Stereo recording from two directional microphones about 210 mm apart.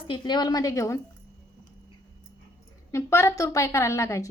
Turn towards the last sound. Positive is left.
turn(degrees=15)  # may be behind; listen again after turning